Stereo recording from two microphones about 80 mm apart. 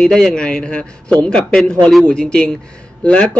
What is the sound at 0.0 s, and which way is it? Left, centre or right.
A man's voice, centre.